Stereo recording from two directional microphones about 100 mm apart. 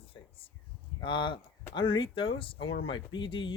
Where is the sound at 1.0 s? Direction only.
55° left (ahead or behind).